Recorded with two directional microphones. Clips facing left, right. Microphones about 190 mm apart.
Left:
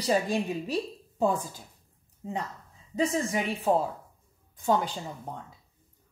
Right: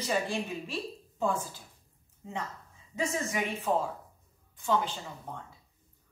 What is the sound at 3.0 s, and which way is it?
A woman's voice, 35° left (ahead or behind).